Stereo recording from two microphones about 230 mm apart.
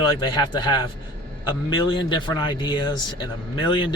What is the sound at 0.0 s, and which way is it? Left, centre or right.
Speech, centre.